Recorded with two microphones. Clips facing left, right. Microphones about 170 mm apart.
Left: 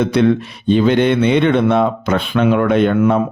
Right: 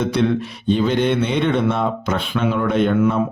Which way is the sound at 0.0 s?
60° left (ahead or behind).